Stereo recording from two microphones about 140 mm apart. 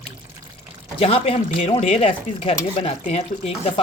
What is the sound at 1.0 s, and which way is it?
Stir, 45° left (ahead or behind).